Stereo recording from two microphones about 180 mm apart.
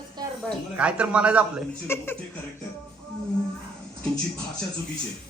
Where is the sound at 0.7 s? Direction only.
5° right (ahead or behind).